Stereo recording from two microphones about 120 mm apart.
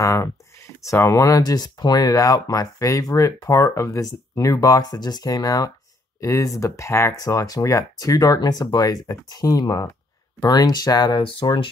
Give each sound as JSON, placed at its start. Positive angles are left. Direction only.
{"t": 0.0, "sound": "speech", "side_deg": 25}